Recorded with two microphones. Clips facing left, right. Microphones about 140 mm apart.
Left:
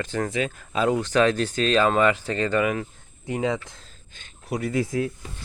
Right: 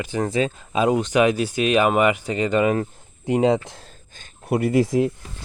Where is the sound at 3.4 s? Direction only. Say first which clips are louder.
Right 7 dB; 35° right (ahead or behind).